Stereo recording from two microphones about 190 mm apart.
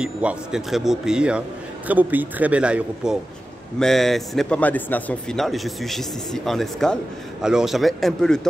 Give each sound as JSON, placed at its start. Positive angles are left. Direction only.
{"t": 0.0, "sound": "a man's voice", "side_deg": -5}